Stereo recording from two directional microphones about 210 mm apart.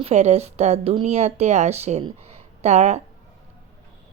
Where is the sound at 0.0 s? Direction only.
30° right (ahead or behind).